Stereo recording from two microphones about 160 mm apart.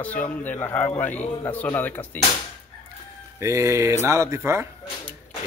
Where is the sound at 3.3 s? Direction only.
20° right (ahead or behind).